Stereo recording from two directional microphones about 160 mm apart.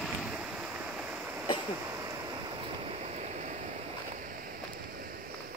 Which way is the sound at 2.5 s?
40° right (ahead or behind).